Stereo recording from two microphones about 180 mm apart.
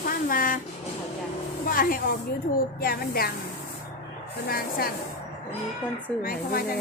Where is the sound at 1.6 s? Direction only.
50° left (ahead or behind).